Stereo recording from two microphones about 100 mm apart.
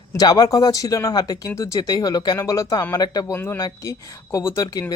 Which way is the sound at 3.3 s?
25° left (ahead or behind).